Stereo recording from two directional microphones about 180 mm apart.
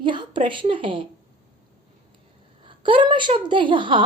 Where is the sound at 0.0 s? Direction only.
25° right (ahead or behind).